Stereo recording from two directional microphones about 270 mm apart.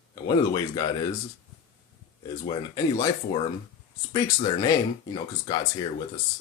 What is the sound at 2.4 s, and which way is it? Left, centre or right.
Speech, centre.